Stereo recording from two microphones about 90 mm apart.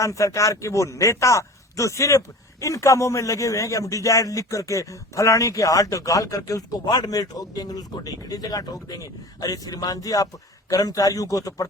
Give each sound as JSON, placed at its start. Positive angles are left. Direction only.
{"t": 0.0, "sound": "a man's voice", "side_deg": 35}